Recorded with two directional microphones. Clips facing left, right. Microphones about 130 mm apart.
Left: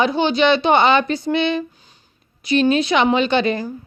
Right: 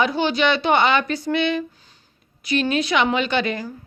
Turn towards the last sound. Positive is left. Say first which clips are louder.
# left 4 dB
turn(degrees=30)  # may be behind; listen again after turning